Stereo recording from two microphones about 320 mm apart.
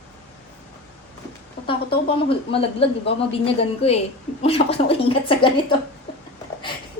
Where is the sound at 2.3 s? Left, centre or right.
Centre.